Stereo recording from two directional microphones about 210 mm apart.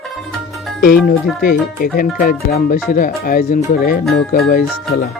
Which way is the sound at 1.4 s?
45° left (ahead or behind).